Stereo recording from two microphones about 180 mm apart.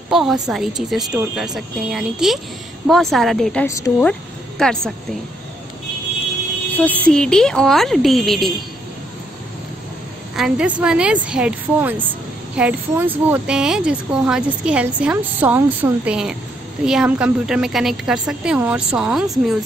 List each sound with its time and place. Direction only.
0.1 s speech: centre (ahead or behind)
3.6 s speech: 15° left (ahead or behind)
4.0 s speech: 5° left (ahead or behind)
7.1 s speech: 5° left (ahead or behind)
10.3 s a woman's voice: 5° right (ahead or behind)